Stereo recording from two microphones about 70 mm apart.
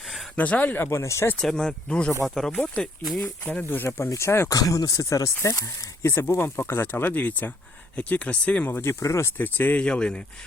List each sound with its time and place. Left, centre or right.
0.0 s a sound: centre
0.3 s speech: left
0.9 s speech: left
1.4 s speech: centre
2.2 s speech: centre
3.4 s speech: centre
3.8 s speech: left
4.4 s speech: left; by 8.7 s centre
8.7 s speech: left
9.4 s speech: left
9.8 s speech: centre